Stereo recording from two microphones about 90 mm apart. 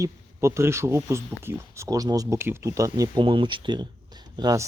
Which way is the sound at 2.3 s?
30° right (ahead or behind).